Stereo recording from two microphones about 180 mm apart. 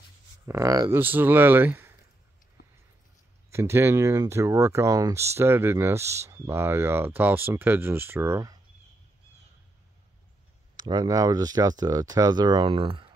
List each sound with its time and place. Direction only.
0.5 s speech: 20° right (ahead or behind)
3.5 s speech: 15° right (ahead or behind)
10.8 s speech: 20° right (ahead or behind)